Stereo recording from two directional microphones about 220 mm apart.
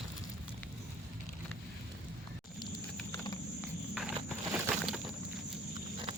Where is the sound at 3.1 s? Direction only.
15° left (ahead or behind).